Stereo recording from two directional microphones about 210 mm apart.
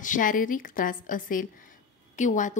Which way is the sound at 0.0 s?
40° left (ahead or behind).